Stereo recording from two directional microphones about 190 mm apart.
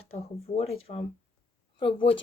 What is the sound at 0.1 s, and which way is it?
Speech, 30° left (ahead or behind).